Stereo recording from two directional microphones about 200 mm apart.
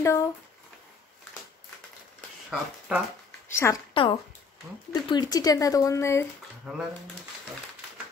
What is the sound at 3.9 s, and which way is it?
Speech, 25° left (ahead or behind).